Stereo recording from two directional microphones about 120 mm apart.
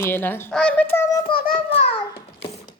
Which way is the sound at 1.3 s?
50° left (ahead or behind).